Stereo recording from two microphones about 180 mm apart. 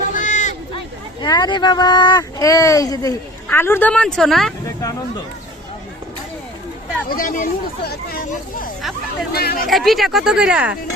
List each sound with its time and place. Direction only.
0.1 s a sound: 45° left (ahead or behind)
1.2 s speech: 25° left (ahead or behind); by 4.5 s centre (ahead or behind)
4.6 s speech: 20° left (ahead or behind)
7.1 s speech: 50° left (ahead or behind)
9.6 s speech: centre (ahead or behind)